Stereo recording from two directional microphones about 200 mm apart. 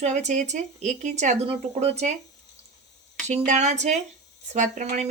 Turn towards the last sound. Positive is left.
turn(degrees=-35)  # may be behind; listen again after turning